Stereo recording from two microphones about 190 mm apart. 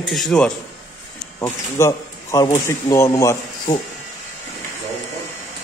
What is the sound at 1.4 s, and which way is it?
Speech, 15° left (ahead or behind).